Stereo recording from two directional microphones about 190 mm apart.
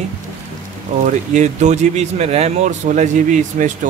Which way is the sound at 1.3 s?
40° right (ahead or behind).